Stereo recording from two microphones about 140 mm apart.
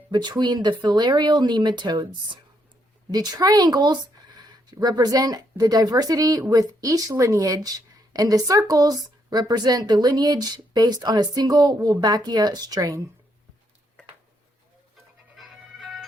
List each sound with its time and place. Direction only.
0.1 s a woman's voice: 30° right (ahead or behind)
15.4 s music: centre (ahead or behind)